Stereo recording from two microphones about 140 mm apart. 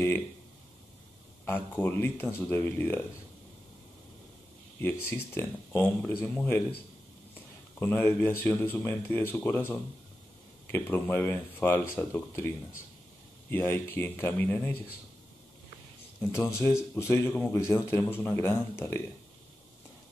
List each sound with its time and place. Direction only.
1.4 s speech: 15° left (ahead or behind)
5.0 s speech: 15° left (ahead or behind)
7.8 s speech: 15° left (ahead or behind)
16.2 s speech: 20° left (ahead or behind)